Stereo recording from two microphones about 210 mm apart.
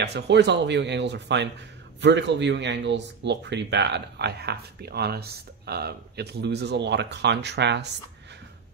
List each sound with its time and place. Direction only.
0.0 s speech: 55° right (ahead or behind)